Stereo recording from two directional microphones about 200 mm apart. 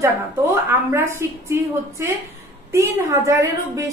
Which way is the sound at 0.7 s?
10° right (ahead or behind).